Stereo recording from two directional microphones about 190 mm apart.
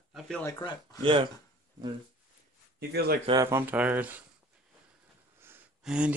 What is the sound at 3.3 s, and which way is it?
Speech, 15° right (ahead or behind).